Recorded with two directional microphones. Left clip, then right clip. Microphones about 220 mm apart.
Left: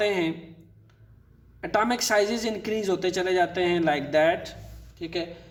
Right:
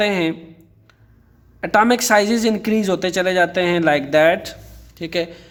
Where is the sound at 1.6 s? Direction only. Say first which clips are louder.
Right 9 dB; 40° right (ahead or behind).